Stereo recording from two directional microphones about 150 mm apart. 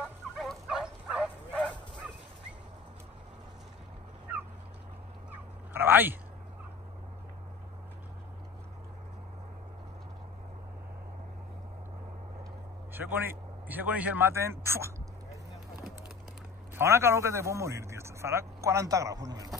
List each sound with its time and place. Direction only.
0.4 s bow-wow: centre (ahead or behind)
5.3 s dog: 15° right (ahead or behind)
12.9 s speech: 15° right (ahead or behind)
16.7 s a man's voice: 15° right (ahead or behind)